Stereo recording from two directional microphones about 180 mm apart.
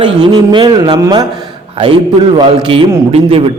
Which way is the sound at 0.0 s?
25° right (ahead or behind).